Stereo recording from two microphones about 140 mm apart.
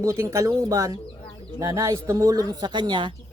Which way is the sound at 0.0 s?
20° right (ahead or behind).